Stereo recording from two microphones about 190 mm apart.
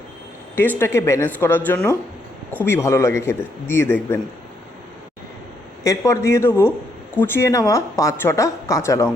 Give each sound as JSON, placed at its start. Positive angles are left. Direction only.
{"t": 0.8, "sound": "a woman's voice", "side_deg": 15}
{"t": 5.8, "sound": "a woman's voice", "side_deg": 15}